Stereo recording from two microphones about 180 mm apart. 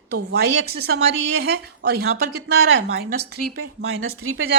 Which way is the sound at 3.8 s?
65° right (ahead or behind).